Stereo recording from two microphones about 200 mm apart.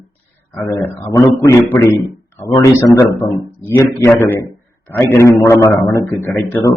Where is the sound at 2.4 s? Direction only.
15° left (ahead or behind).